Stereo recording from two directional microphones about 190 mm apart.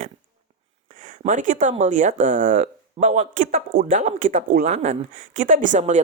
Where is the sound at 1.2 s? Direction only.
40° right (ahead or behind).